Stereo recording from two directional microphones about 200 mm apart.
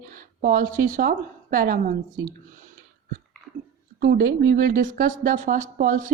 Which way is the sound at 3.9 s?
50° right (ahead or behind).